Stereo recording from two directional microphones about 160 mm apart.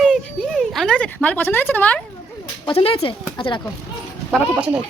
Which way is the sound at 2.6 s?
35° left (ahead or behind).